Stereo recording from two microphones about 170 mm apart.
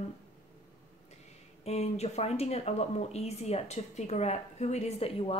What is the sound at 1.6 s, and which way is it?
Speech, 40° left (ahead or behind).